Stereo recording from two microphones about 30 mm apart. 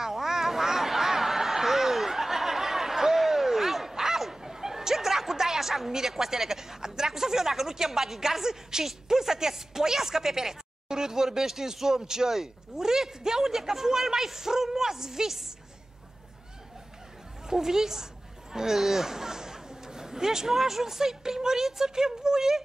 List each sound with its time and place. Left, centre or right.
0.0 s a sound: centre
3.9 s speech: centre
17.5 s a woman's voice: centre